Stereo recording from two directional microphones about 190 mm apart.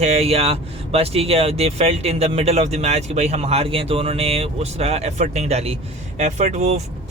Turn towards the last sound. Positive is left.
turn(degrees=-35)  # may be behind; listen again after turning